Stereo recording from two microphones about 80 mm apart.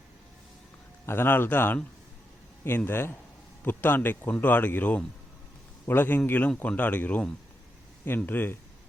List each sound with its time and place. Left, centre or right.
1.0 s speech: left